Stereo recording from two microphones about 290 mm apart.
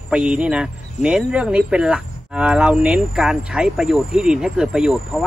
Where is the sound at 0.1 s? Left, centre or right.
Centre.